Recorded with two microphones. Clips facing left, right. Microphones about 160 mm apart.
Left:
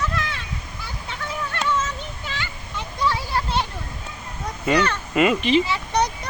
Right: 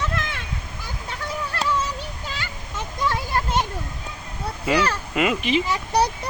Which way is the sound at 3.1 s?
45° right (ahead or behind).